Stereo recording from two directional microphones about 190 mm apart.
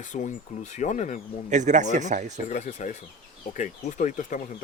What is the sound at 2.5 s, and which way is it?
Speech, 40° left (ahead or behind).